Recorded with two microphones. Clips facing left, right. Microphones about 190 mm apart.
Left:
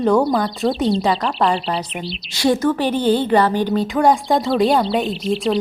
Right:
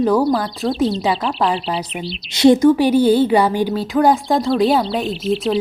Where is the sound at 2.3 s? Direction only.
20° right (ahead or behind).